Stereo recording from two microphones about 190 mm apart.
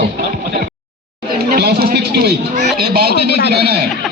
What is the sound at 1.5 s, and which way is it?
A man's voice, 55° right (ahead or behind).